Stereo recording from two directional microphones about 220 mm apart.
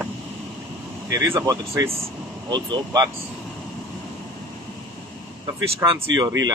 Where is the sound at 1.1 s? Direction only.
15° right (ahead or behind).